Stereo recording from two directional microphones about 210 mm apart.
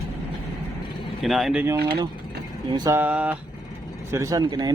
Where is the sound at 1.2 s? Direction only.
Centre (ahead or behind).